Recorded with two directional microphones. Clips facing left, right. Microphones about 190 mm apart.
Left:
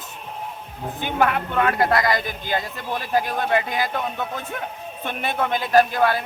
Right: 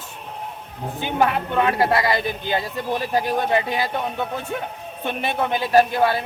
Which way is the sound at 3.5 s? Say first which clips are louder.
Right 1 dB; 25° right (ahead or behind).